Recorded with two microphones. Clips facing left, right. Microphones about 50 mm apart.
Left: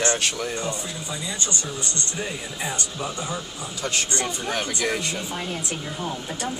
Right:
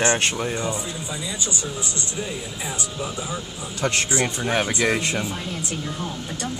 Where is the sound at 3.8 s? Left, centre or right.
Right.